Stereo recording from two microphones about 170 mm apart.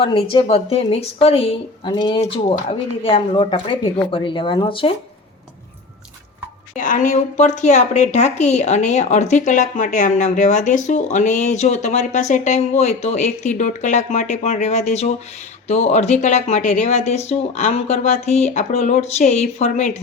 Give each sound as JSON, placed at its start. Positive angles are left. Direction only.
{"t": 0.0, "sound": "speech", "side_deg": 30}
{"t": 6.7, "sound": "speech", "side_deg": 50}